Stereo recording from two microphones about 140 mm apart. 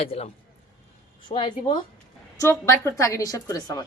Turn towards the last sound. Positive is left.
turn(degrees=25)  # may be behind; listen again after turning